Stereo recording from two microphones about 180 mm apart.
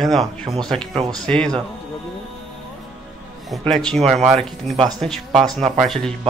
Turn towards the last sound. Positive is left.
turn(degrees=0)  # may be behind; listen again after turning